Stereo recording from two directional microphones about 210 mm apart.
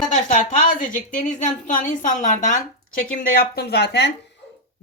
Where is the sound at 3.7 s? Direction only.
55° left (ahead or behind).